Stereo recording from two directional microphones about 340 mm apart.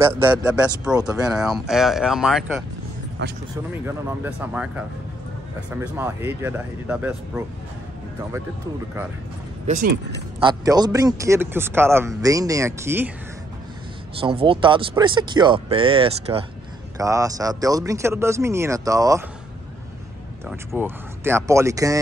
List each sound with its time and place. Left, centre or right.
0.0 s speech: centre
3.2 s speech: right
3.8 s speech: centre
9.7 s speech: right
10.5 s speech: centre
14.2 s speech: centre
20.4 s speech: centre